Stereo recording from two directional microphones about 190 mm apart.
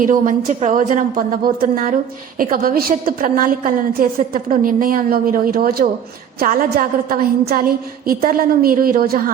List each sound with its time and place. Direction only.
0.0 s a woman's voice: 45° right (ahead or behind)